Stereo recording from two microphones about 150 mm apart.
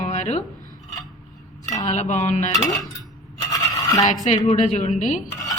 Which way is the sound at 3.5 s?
25° left (ahead or behind).